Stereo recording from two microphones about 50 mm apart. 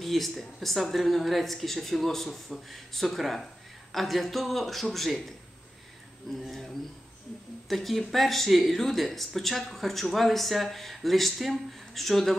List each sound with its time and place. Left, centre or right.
0.0 s speech: centre
6.4 s speech: centre